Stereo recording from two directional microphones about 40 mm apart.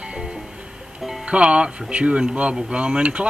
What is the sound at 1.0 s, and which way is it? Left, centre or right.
Music, centre.